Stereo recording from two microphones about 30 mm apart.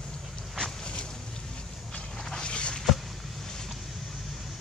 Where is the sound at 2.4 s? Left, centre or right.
Left.